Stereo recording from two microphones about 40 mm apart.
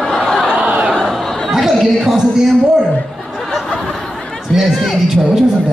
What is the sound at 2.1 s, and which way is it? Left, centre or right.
Speech, centre.